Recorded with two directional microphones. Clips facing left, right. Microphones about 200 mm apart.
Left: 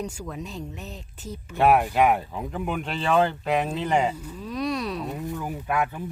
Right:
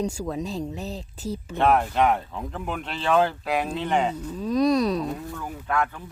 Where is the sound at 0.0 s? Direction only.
35° right (ahead or behind).